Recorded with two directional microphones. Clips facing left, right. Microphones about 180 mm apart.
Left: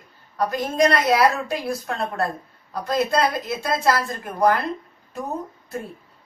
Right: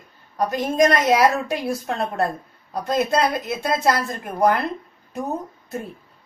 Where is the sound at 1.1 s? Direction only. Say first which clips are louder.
Right 1 dB; 20° right (ahead or behind).